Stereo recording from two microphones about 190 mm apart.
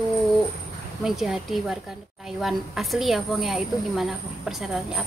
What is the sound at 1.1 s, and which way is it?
A woman's voice, centre (ahead or behind).